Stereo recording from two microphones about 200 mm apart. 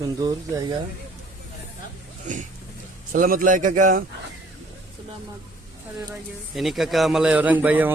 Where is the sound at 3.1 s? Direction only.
45° right (ahead or behind).